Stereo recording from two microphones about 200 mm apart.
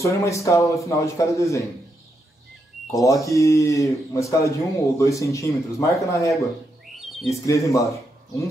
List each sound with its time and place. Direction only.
0.0 s speech: 15° left (ahead or behind)
2.9 s speech: 15° left (ahead or behind)
7.0 s bird: centre (ahead or behind)
7.4 s speech: 15° left (ahead or behind)